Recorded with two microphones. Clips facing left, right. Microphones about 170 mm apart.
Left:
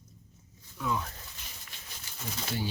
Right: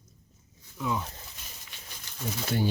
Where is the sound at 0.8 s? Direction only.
15° right (ahead or behind).